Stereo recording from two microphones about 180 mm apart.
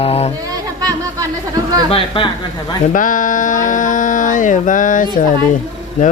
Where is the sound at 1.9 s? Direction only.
30° left (ahead or behind).